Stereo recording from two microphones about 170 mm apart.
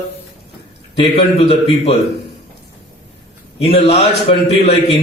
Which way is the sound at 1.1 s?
35° left (ahead or behind).